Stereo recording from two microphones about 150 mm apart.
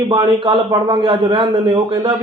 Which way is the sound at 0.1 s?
35° right (ahead or behind).